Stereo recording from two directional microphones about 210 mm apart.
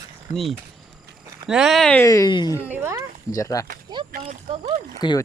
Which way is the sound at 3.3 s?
15° left (ahead or behind).